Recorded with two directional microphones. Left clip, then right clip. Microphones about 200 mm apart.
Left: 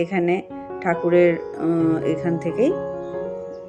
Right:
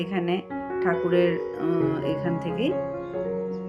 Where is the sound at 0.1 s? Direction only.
20° left (ahead or behind).